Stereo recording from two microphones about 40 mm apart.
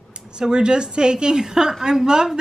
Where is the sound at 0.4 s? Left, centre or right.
Right.